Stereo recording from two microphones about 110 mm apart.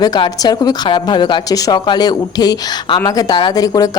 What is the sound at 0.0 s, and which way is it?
Speech, 40° left (ahead or behind).